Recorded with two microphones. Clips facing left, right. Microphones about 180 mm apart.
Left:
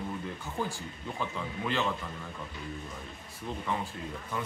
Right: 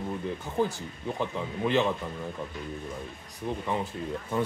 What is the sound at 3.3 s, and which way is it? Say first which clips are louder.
Speech: right 4 dB; 15° right (ahead or behind).